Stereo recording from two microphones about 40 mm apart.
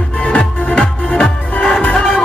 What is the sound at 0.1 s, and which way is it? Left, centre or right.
Music, left.